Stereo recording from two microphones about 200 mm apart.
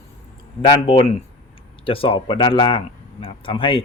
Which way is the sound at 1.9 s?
25° left (ahead or behind).